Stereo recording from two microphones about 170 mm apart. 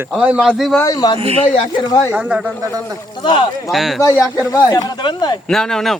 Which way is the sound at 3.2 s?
30° left (ahead or behind).